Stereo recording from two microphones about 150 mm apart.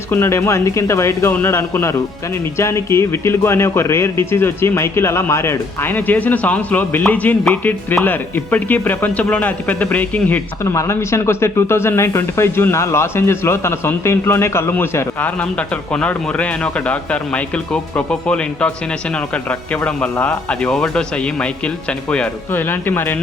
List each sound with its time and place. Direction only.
0.1 s a man's voice: 15° left (ahead or behind)